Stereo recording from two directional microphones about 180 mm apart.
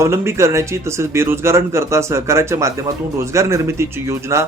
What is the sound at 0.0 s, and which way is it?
Speech, 15° right (ahead or behind).